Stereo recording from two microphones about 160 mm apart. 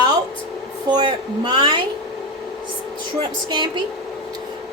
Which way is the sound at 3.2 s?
30° right (ahead or behind).